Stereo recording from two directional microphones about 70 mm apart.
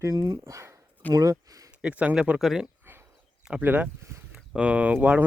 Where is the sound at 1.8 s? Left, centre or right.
Right.